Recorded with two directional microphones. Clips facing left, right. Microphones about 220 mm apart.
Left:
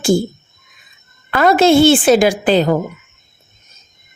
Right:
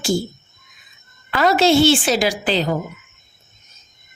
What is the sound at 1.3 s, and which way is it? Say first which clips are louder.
A woman's voice: left 4 dB; 50° left (ahead or behind).